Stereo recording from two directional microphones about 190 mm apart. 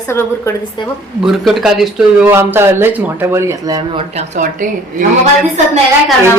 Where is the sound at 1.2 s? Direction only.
Centre (ahead or behind); by 4.0 s 20° right (ahead or behind).